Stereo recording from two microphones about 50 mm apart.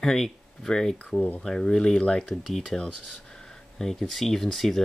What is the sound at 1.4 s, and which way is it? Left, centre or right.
Speech, centre.